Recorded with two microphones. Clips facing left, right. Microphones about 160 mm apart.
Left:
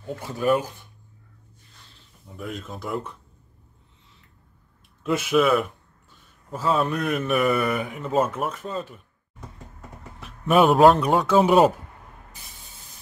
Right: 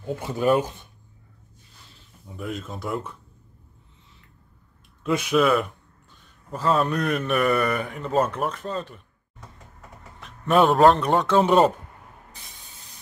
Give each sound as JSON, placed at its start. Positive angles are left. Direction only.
{"t": 0.0, "sound": "speech", "side_deg": -20}
{"t": 2.2, "sound": "a man's voice", "side_deg": 0}
{"t": 5.0, "sound": "a man's voice", "side_deg": 5}